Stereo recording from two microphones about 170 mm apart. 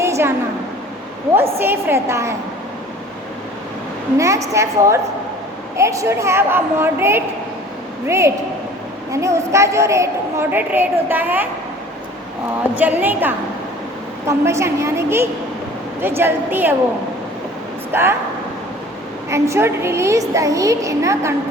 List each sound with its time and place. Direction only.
0.0 s a sound: 15° right (ahead or behind)
1.5 s a woman's voice: 15° right (ahead or behind)
4.2 s a woman's voice: 20° right (ahead or behind)
12.8 s a woman's voice: 10° right (ahead or behind)
17.9 s a woman's voice: 15° right (ahead or behind)
19.3 s a woman's voice: 15° right (ahead or behind)